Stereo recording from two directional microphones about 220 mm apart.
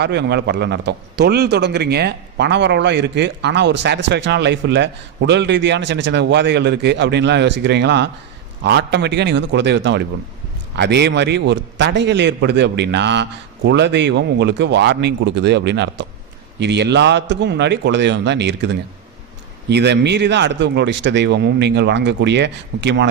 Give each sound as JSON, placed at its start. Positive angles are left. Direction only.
{"t": 0.0, "sound": "a man's voice", "side_deg": -50}